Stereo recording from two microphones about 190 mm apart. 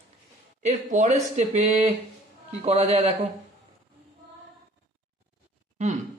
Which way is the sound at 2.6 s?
30° right (ahead or behind).